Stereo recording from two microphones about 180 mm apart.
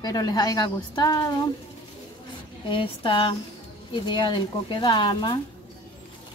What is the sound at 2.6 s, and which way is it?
A woman's voice, 30° left (ahead or behind).